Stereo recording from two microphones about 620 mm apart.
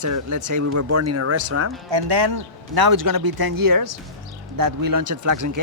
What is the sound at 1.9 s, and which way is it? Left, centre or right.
A man's voice, right.